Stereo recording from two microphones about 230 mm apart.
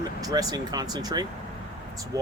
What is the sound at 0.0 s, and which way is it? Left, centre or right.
Speech, centre.